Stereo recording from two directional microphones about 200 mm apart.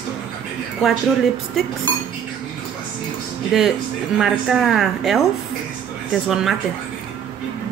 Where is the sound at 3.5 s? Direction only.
Centre (ahead or behind).